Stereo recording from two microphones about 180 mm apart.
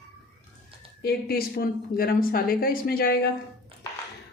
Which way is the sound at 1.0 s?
60° left (ahead or behind).